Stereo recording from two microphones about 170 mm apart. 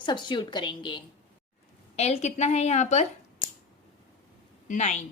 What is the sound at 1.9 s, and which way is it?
A woman's voice, 40° left (ahead or behind).